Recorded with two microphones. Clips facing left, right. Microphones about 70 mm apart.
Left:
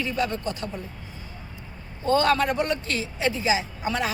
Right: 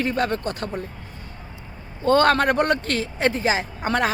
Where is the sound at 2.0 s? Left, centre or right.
Right.